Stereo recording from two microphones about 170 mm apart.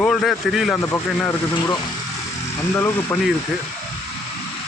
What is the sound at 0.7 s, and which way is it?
Speech, 15° left (ahead or behind).